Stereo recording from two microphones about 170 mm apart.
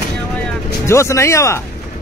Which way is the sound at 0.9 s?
15° left (ahead or behind).